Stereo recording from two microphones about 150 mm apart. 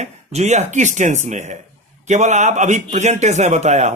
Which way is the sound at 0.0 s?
50° right (ahead or behind).